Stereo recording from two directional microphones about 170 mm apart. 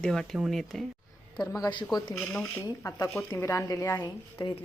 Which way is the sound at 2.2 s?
Centre (ahead or behind).